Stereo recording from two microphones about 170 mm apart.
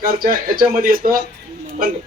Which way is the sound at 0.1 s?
60° right (ahead or behind).